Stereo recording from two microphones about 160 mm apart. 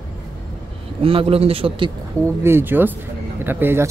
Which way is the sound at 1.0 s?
35° right (ahead or behind).